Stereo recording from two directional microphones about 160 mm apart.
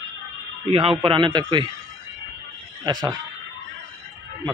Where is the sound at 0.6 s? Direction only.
35° right (ahead or behind).